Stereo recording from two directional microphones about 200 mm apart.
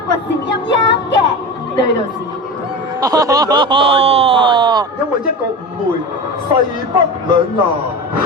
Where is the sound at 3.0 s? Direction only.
15° right (ahead or behind).